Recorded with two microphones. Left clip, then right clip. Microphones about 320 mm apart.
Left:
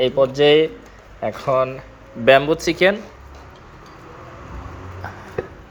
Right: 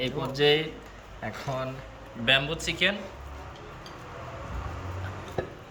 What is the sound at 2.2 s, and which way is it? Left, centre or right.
Speech, centre.